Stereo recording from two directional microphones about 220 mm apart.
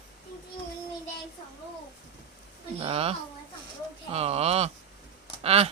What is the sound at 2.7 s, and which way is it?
A woman's voice, 25° right (ahead or behind).